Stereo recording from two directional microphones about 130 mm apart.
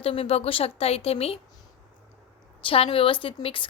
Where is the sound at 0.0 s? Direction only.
50° left (ahead or behind).